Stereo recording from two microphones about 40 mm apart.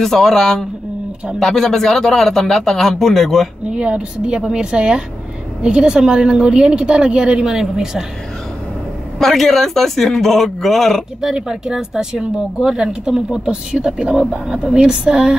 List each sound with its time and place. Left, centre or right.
0.0 s a man's voice: centre
3.7 s speech: right
7.4 s speech: centre
9.2 s speech: centre
11.1 s speech: centre